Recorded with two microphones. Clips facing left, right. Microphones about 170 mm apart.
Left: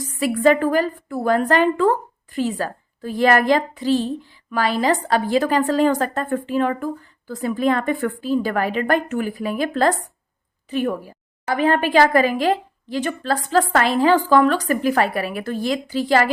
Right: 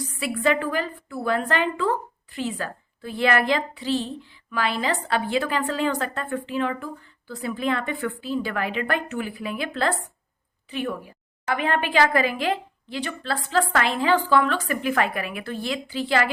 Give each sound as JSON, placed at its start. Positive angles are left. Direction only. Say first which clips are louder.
{"t": 0.0, "sound": "a woman's voice", "louder": "left 7 dB", "side_deg": 40}